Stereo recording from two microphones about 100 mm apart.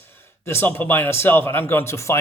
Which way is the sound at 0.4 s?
25° left (ahead or behind).